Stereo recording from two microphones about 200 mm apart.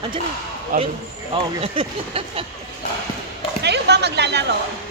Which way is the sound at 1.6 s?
25° right (ahead or behind).